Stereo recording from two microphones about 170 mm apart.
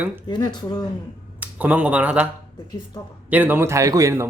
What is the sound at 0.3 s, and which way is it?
Speech, 25° left (ahead or behind).